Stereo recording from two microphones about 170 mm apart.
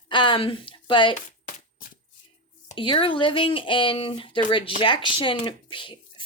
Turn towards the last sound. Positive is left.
turn(degrees=30)  # may be behind; listen again after turning